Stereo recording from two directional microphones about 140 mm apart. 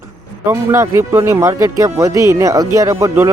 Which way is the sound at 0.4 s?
20° right (ahead or behind).